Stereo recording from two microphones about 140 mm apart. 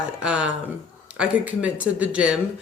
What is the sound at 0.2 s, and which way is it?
Speech, 5° right (ahead or behind).